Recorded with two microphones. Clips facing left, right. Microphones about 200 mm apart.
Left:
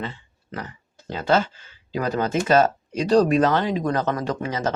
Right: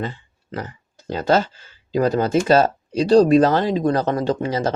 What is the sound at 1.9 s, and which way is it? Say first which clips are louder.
Speech: right 6 dB; 35° right (ahead or behind).